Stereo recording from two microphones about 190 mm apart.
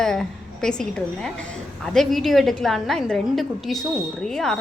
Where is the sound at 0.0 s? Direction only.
5° left (ahead or behind).